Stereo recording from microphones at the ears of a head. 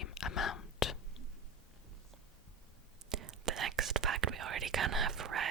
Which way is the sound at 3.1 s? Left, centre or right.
Right.